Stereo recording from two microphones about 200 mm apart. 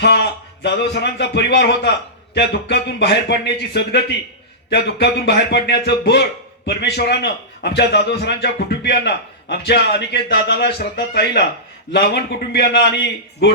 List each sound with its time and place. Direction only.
0.0 s a man's voice: 55° left (ahead or behind)